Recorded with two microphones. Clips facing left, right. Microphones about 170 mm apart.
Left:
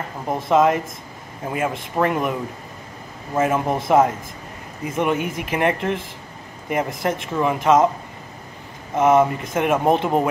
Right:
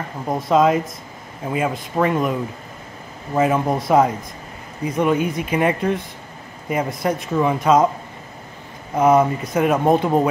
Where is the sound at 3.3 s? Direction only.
Centre (ahead or behind).